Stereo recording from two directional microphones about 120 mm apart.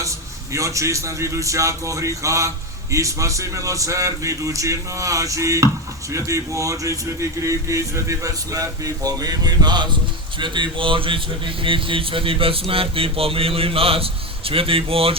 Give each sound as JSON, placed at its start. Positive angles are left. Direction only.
{"t": 0.5, "sound": "a man's voice", "side_deg": -25}